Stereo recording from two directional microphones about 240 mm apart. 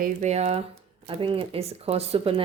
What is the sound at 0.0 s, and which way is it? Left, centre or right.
Speech, right.